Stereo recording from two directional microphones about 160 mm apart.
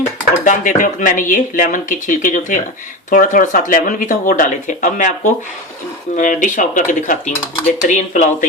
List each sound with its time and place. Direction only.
0.4 s speech: 55° left (ahead or behind)